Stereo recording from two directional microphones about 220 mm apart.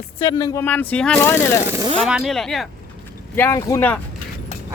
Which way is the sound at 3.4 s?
10° left (ahead or behind).